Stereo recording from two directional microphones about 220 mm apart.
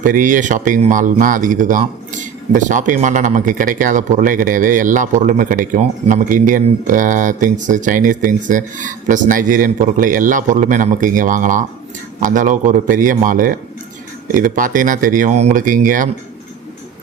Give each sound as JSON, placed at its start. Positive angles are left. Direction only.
{"t": 0.0, "sound": "speech", "side_deg": -35}